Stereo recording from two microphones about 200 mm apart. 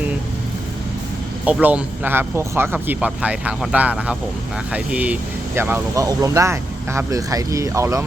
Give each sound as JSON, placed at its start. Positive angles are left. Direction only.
{"t": 1.5, "sound": "speech", "side_deg": -5}